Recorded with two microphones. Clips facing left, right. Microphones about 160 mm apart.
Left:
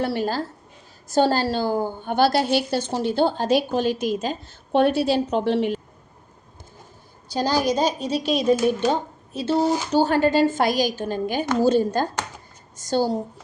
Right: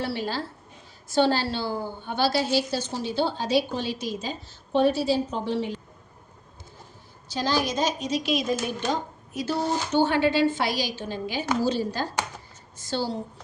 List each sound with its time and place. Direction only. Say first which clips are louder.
0.0 s a woman's voice: left 5 dB; 50° left (ahead or behind); by 5.7 s 70° left (ahead or behind)
7.4 s a child's voice: left 4 dB; 15° left (ahead or behind)
7.8 s a woman's voice: left 4 dB; 35° left (ahead or behind)